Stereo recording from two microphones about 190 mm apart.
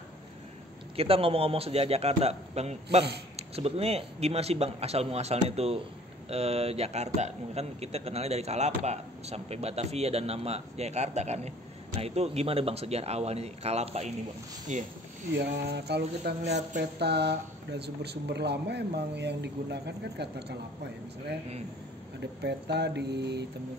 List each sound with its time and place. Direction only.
0.9 s a man's voice: 30° right (ahead or behind)
15.3 s speech: 60° right (ahead or behind)
22.4 s speech: 60° right (ahead or behind)